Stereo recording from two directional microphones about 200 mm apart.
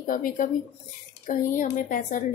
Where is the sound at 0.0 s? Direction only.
45° left (ahead or behind).